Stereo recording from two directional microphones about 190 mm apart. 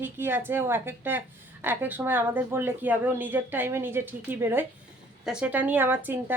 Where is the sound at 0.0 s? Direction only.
10° right (ahead or behind).